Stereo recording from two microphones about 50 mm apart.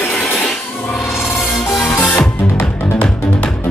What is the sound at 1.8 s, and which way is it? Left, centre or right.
Music, left.